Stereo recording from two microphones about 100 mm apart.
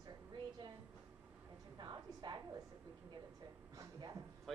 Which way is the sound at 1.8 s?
50° right (ahead or behind).